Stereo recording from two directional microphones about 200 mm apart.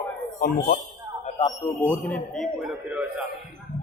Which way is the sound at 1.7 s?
5° left (ahead or behind).